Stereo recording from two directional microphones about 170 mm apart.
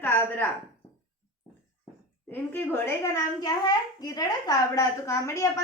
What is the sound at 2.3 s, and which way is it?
A child's voice, 15° left (ahead or behind).